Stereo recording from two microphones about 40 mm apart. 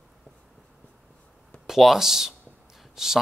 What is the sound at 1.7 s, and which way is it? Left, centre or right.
Speech, centre.